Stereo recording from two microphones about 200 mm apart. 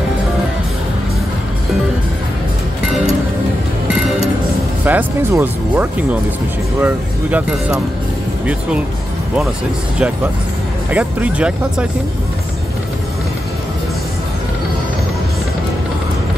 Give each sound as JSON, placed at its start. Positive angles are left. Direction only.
{"t": 3.9, "sound": "music", "side_deg": 0}
{"t": 4.8, "sound": "speech", "side_deg": -10}
{"t": 10.9, "sound": "speech", "side_deg": -5}